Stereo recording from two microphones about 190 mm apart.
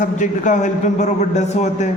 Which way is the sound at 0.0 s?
40° left (ahead or behind).